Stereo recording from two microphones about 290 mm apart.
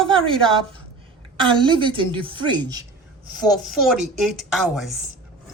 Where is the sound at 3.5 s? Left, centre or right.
Centre.